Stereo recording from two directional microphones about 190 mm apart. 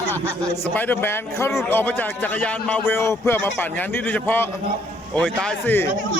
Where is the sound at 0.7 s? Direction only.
10° left (ahead or behind).